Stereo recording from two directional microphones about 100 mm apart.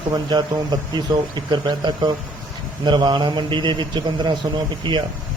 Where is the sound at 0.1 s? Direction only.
40° right (ahead or behind).